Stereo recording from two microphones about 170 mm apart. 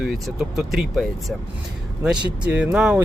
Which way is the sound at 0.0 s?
Centre (ahead or behind).